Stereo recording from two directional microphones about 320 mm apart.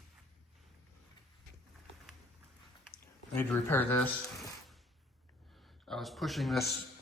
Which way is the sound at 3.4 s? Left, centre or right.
Centre.